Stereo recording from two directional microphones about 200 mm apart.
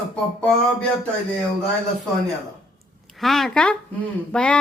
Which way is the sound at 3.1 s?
Centre (ahead or behind).